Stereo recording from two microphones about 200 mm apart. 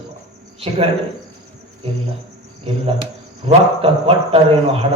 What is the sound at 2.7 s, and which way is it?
Speech, 30° right (ahead or behind).